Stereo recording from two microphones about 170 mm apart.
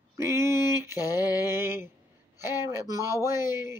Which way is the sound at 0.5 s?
20° left (ahead or behind).